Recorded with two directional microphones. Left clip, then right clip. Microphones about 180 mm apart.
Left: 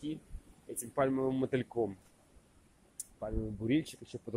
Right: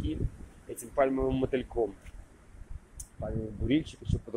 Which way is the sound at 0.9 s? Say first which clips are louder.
Right 4 dB; 15° left (ahead or behind).